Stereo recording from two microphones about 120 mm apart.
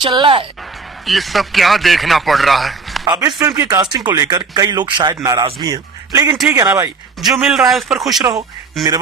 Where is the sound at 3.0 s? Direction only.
30° right (ahead or behind).